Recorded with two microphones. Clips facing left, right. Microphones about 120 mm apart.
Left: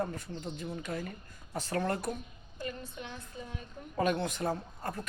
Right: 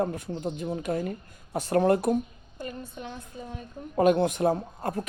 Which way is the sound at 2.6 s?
40° right (ahead or behind).